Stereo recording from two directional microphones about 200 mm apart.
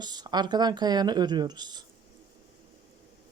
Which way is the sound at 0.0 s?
20° right (ahead or behind).